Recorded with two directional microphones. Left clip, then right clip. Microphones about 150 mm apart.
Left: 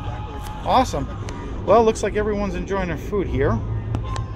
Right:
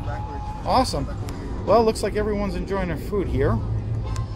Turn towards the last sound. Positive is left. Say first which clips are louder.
# left 2 dB
turn(degrees=-5)  # may be behind; listen again after turning